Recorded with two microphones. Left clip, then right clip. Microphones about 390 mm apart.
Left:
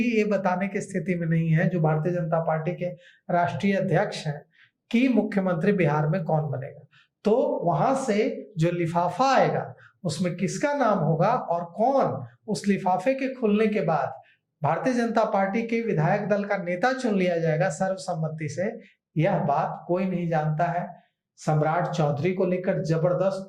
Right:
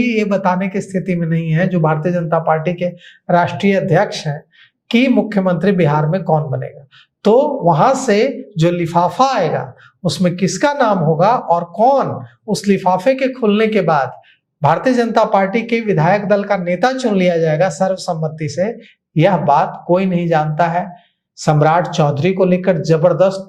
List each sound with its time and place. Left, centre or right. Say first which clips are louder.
0.0 s speech: right 8 dB; right
7.2 s speech: right 11 dB; right